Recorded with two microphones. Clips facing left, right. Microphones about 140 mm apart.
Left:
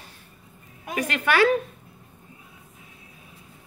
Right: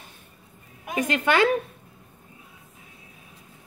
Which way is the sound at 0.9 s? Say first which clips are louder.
Right 1 dB; 20° right (ahead or behind).